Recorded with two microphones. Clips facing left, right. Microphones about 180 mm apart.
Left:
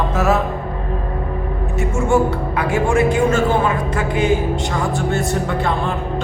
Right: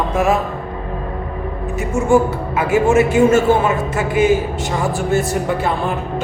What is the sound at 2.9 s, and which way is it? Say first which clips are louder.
Speech: right 2 dB; 5° right (ahead or behind).